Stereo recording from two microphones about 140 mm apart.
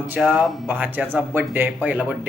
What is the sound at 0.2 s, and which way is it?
Speech, 5° right (ahead or behind).